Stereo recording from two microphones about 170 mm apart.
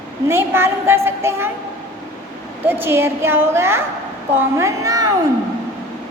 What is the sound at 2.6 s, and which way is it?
A woman's voice, 15° right (ahead or behind).